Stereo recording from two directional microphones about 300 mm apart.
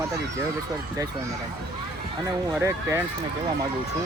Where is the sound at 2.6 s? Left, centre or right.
Centre.